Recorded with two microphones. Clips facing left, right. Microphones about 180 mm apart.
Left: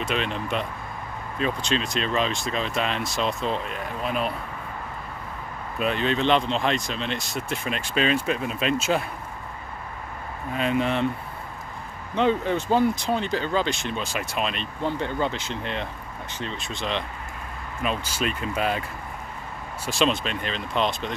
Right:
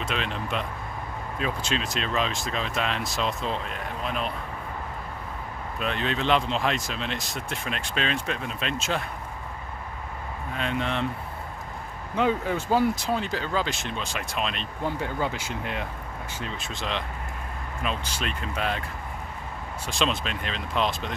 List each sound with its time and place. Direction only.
0.0 s speech: centre (ahead or behind)
5.8 s speech: centre (ahead or behind)
10.6 s speech: 5° left (ahead or behind)
12.2 s speech: 5° right (ahead or behind)
19.9 s speech: centre (ahead or behind)